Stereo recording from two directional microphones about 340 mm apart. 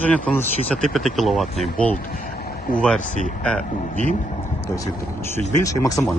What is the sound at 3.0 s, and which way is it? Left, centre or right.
Speech, left.